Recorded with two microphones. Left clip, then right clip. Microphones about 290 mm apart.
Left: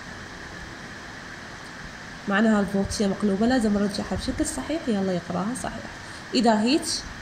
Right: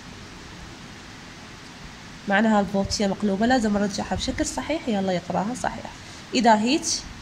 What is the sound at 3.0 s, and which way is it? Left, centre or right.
Speech, right.